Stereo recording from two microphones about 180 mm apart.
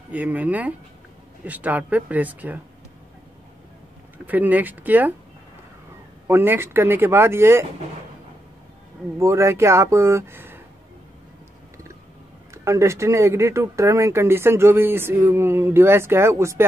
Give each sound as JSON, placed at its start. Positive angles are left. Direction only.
{"t": 0.1, "sound": "speech", "side_deg": -10}
{"t": 4.3, "sound": "speech", "side_deg": -10}
{"t": 6.2, "sound": "speech", "side_deg": -10}
{"t": 9.2, "sound": "speech", "side_deg": -15}
{"t": 12.6, "sound": "speech", "side_deg": -15}